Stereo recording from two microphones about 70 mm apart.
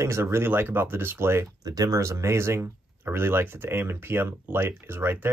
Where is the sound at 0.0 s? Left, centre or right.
Right.